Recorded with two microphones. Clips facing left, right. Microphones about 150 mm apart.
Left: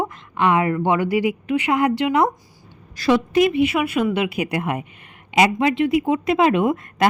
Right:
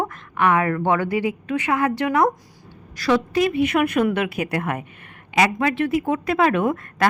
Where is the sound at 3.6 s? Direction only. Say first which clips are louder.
Right 1 dB; 5° left (ahead or behind).